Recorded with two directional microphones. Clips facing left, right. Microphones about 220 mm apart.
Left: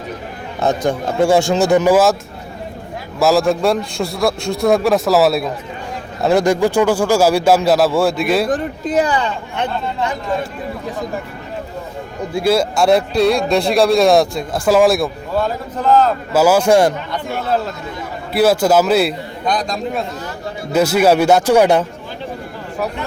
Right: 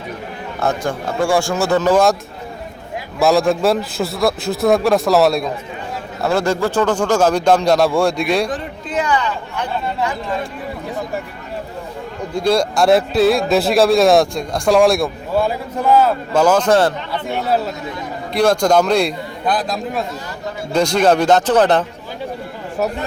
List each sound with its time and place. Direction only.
0.6 s speech: 20° left (ahead or behind)
3.2 s speech: centre (ahead or behind)
6.2 s a man's voice: 15° left (ahead or behind)
8.4 s speech: 40° left (ahead or behind)
12.3 s speech: 5° left (ahead or behind)
15.4 s a man's voice: 10° right (ahead or behind)
16.3 s a man's voice: 5° left (ahead or behind)
18.3 s speech: 5° left (ahead or behind)
20.7 s a man's voice: 5° left (ahead or behind)